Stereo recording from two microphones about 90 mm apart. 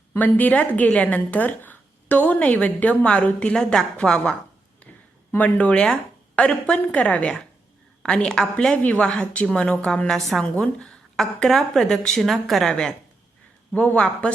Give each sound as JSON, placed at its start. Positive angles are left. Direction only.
{"t": 0.2, "sound": "a woman's voice", "side_deg": 20}
{"t": 10.4, "sound": "a woman's voice", "side_deg": 15}
{"t": 13.7, "sound": "a woman's voice", "side_deg": 15}